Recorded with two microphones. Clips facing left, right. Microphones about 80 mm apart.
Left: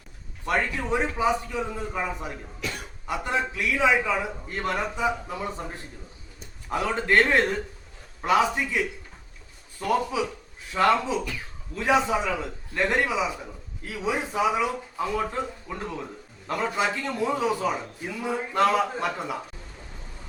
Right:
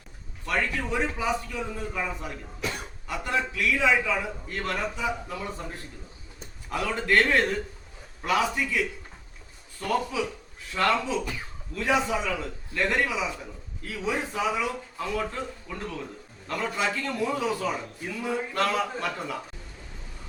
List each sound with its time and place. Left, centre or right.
0.4 s a man's voice: left